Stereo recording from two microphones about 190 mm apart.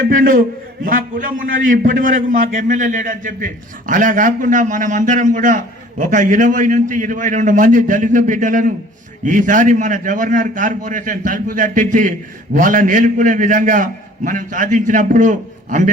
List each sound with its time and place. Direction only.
0.0 s a man's voice: 45° right (ahead or behind)